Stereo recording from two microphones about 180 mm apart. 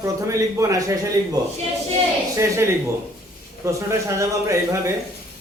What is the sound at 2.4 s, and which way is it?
Speech, 15° right (ahead or behind).